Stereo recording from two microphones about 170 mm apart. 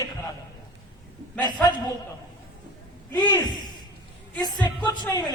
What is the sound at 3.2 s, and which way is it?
A man's voice, 25° left (ahead or behind).